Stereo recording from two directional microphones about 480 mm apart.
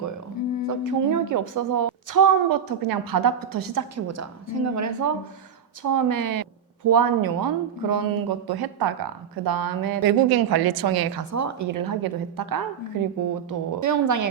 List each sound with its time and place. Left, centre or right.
0.7 s a woman's voice: right
11.3 s a woman's voice: right